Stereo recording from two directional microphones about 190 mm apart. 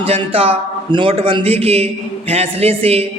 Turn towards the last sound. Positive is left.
turn(degrees=-30)  # may be behind; listen again after turning